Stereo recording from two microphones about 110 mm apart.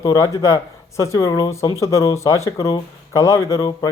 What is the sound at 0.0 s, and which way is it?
Speech, 35° left (ahead or behind).